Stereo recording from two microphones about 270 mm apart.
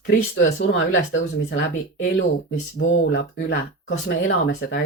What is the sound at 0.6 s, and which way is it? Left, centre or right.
Speech, left.